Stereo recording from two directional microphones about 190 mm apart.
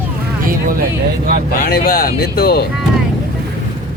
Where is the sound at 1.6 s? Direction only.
50° left (ahead or behind).